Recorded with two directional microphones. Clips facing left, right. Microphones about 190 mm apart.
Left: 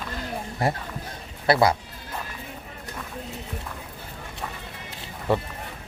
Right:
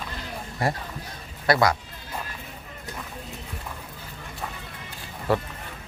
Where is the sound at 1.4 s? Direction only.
30° left (ahead or behind).